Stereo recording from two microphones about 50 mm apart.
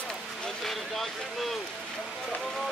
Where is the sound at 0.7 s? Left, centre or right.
Centre.